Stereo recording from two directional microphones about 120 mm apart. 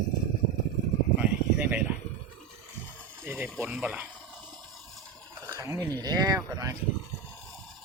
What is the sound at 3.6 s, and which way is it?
Speech, 10° right (ahead or behind).